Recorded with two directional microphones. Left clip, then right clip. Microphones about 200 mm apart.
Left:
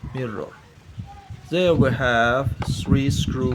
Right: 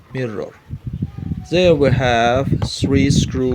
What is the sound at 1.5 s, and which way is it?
Speech, 25° right (ahead or behind).